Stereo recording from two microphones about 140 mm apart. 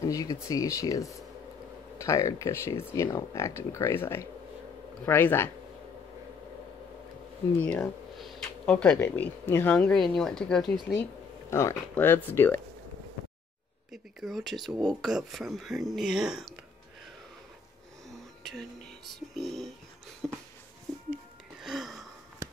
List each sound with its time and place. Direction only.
0.0 s speech: 25° left (ahead or behind)
7.5 s speech: 10° left (ahead or behind)
7.8 s speech: centre (ahead or behind)
11.5 s speech: 15° left (ahead or behind)
14.2 s speech: centre (ahead or behind)
18.4 s speech: centre (ahead or behind)
20.2 s a sound: 5° right (ahead or behind)
21.6 s a sound: centre (ahead or behind)